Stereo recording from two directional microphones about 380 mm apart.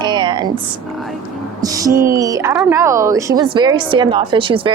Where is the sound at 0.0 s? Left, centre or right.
Centre.